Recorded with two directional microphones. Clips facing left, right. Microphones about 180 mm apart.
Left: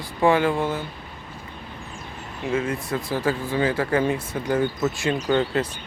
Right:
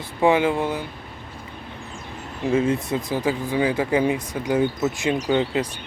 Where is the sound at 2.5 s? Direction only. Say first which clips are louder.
Right 4 dB; 30° right (ahead or behind).